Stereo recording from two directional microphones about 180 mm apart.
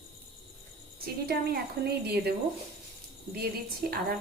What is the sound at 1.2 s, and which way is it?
A woman's voice, 60° right (ahead or behind).